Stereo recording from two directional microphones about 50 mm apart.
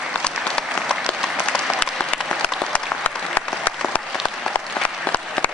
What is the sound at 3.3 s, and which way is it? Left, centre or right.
Applause, left.